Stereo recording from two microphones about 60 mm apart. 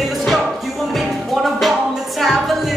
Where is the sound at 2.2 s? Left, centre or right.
Centre.